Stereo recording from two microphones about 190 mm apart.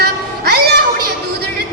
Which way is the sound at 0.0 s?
55° right (ahead or behind).